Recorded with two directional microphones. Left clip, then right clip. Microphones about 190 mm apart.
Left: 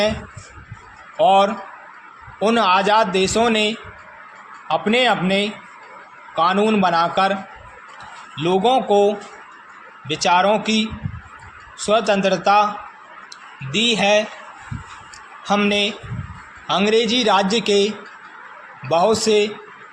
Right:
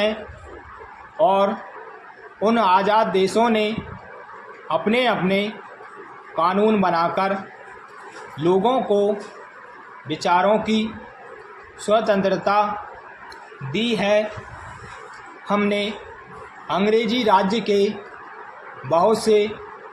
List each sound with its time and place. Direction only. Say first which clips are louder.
1.2 s speech: left 3 dB; 35° left (ahead or behind)
8.4 s speech: left 2 dB; 30° left (ahead or behind)
10.1 s speech: left 2 dB; 35° left (ahead or behind)
11.9 s speech: left 2 dB; 35° left (ahead or behind)
13.7 s speech: left 4 dB; 35° left (ahead or behind)
15.4 s speech: left 3 dB; 30° left (ahead or behind)